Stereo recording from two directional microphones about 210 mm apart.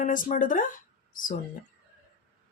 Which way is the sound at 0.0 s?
40° left (ahead or behind).